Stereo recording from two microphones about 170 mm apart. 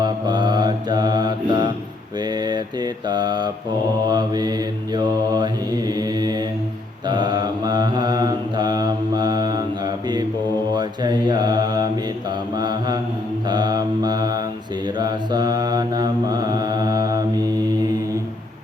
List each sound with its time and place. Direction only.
0.0 s mantra: 25° right (ahead or behind)
10.8 s mantra: 25° right (ahead or behind)